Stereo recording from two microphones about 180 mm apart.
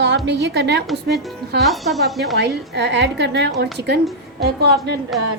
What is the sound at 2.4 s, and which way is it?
A woman's voice, 70° right (ahead or behind).